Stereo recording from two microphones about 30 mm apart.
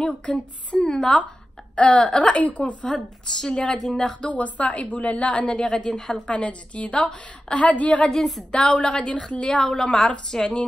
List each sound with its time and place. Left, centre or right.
0.3 s a woman's voice: left
1.8 s a woman's voice: left
2.0 s a woman's voice: left
2.3 s a woman's voice: left
2.9 s a woman's voice: left
4.3 s a woman's voice: left
5.6 s a woman's voice: left
6.2 s a woman's voice: left
8.1 s a woman's voice: centre
8.5 s a woman's voice: left
8.8 s a woman's voice: left
9.7 s a woman's voice: left